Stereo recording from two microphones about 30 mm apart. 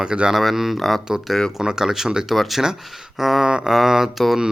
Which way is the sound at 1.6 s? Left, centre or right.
Right.